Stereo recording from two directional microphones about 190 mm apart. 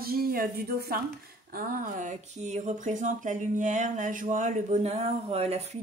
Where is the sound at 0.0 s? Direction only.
50° right (ahead or behind).